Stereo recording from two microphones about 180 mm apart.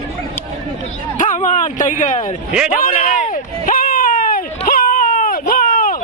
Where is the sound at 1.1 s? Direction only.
45° left (ahead or behind).